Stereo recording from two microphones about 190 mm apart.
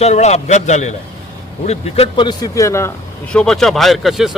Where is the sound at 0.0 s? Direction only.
35° left (ahead or behind); by 2.9 s 15° left (ahead or behind).